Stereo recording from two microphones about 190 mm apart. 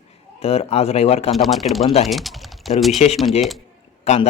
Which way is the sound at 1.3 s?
Centre (ahead or behind).